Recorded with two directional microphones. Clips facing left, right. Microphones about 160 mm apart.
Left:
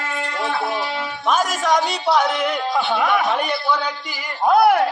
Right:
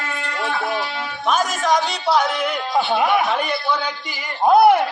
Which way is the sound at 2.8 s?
5° right (ahead or behind).